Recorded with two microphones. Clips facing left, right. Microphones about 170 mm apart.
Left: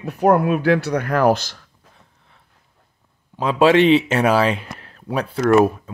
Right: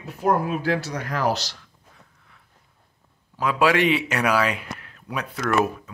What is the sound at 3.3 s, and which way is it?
Speech, 25° left (ahead or behind).